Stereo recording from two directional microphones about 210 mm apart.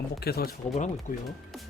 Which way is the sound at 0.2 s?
50° left (ahead or behind).